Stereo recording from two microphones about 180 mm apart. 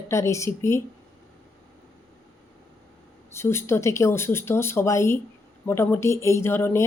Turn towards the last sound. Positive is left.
turn(degrees=10)  # may be behind; listen again after turning